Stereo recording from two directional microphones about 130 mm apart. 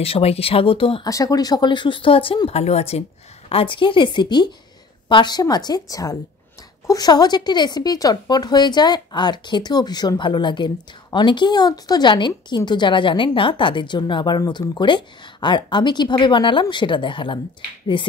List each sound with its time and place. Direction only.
0.0 s speech: 50° left (ahead or behind)
1.0 s speech: 30° left (ahead or behind)